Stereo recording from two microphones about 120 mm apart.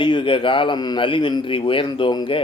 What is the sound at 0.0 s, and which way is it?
Speech, 45° left (ahead or behind).